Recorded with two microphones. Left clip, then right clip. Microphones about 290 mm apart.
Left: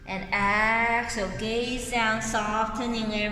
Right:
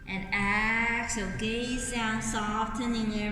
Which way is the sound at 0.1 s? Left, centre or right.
Centre.